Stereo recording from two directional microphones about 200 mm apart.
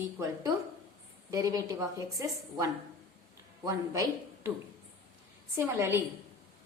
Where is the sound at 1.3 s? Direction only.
15° right (ahead or behind).